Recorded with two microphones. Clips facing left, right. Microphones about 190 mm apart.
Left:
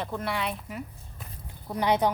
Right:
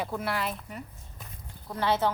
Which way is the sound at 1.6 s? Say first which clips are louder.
Left 2 dB; 15° left (ahead or behind).